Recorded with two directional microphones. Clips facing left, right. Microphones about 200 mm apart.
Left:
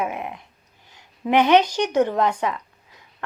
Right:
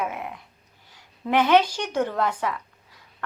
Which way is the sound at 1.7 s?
20° left (ahead or behind).